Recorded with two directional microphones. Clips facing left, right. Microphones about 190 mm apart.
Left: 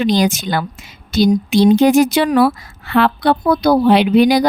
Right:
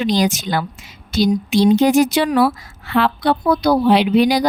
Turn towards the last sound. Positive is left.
turn(degrees=55)  # may be behind; listen again after turning